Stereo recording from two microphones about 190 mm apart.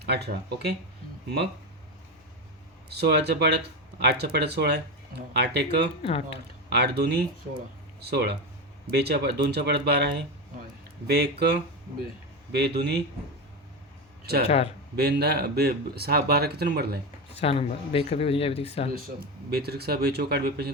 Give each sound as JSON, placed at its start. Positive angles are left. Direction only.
{"t": 0.0, "sound": "speech", "side_deg": -60}
{"t": 2.9, "sound": "speech", "side_deg": -60}
{"t": 6.0, "sound": "speech", "side_deg": 30}
{"t": 6.7, "sound": "speech", "side_deg": -60}
{"t": 14.4, "sound": "speech", "side_deg": 35}
{"t": 14.9, "sound": "speech", "side_deg": -60}
{"t": 17.4, "sound": "speech", "side_deg": 30}
{"t": 18.9, "sound": "speech", "side_deg": -55}